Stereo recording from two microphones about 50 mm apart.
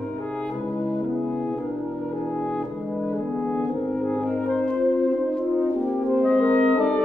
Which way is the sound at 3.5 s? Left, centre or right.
Left.